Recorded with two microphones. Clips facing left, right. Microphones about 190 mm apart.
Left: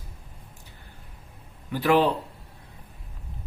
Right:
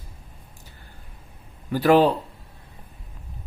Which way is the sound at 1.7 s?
40° right (ahead or behind).